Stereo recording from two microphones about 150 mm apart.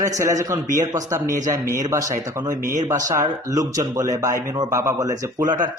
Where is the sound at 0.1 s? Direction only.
20° right (ahead or behind).